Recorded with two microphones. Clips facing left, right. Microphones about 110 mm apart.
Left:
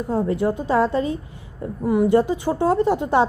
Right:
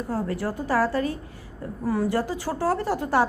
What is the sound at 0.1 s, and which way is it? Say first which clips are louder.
A woman's voice: left 8 dB; 20° left (ahead or behind).